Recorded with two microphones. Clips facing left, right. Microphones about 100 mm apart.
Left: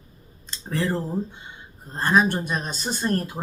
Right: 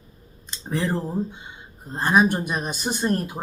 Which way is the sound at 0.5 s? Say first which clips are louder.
Even; 15° right (ahead or behind).